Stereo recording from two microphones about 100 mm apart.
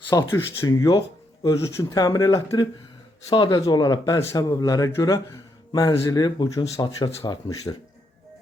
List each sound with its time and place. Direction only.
0.3 s speech: 25° left (ahead or behind)
0.9 s speech: 40° left (ahead or behind)
3.3 s a man's voice: 45° left (ahead or behind)